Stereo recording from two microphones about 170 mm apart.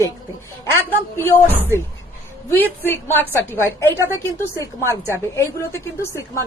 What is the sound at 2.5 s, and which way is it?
A woman's voice, 15° left (ahead or behind).